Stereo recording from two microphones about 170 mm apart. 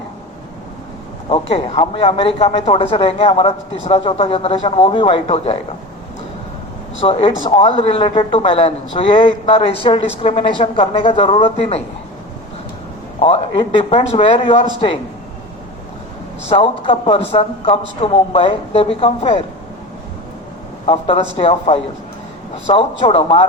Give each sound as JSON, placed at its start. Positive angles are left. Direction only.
{"t": 1.3, "sound": "speech", "side_deg": 30}
{"t": 7.0, "sound": "speech", "side_deg": 35}
{"t": 13.2, "sound": "speech", "side_deg": 30}
{"t": 16.5, "sound": "speech", "side_deg": 30}
{"t": 20.8, "sound": "speech", "side_deg": 35}